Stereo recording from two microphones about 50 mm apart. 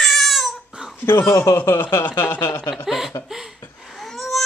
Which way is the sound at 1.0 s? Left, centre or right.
Left.